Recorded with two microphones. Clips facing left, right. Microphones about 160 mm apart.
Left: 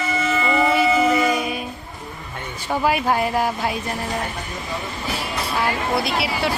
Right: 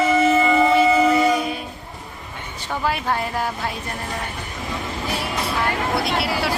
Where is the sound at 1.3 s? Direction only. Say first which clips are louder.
Right 1 dB; 10° left (ahead or behind).